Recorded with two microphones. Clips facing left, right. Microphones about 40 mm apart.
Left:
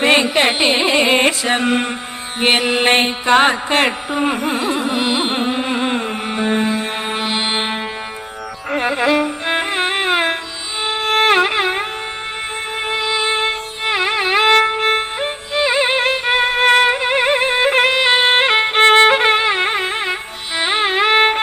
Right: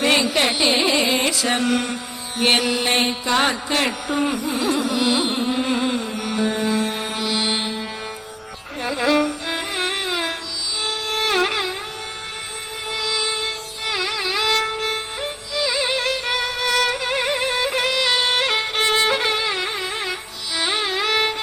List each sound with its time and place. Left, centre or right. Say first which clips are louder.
0.0 s carnatic music: left 5 dB; left
5.5 s music: left 3 dB; left
8.8 s music: left 3 dB; left
12.9 s music: left 5 dB; left